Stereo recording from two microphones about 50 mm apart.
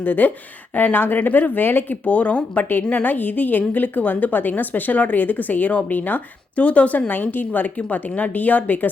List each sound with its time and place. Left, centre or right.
0.0 s a woman's voice: left
2.0 s a woman's voice: left
7.1 s a woman's voice: left